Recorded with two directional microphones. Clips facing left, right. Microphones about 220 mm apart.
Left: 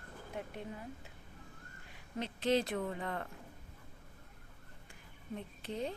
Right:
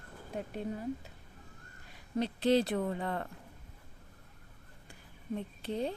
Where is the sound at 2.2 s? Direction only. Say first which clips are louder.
Right 5 dB; 35° right (ahead or behind).